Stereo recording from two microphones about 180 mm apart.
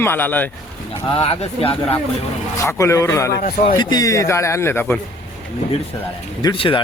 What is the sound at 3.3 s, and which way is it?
Speech, 60° left (ahead or behind).